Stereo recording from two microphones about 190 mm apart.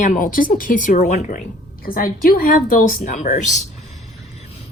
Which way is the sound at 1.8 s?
50° left (ahead or behind).